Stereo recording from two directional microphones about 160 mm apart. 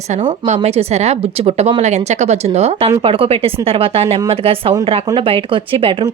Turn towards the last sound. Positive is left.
turn(degrees=-35)  # may be behind; listen again after turning